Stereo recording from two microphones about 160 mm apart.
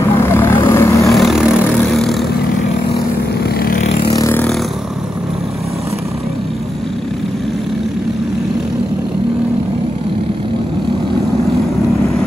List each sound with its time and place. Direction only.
0.0 s vehicle: 15° left (ahead or behind)
1.0 s vehicle: centre (ahead or behind)
3.4 s vehicle: 70° left (ahead or behind)
4.1 s vehicle: 20° left (ahead or behind)